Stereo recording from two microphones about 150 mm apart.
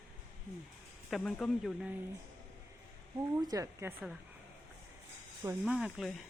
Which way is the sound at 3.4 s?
25° right (ahead or behind).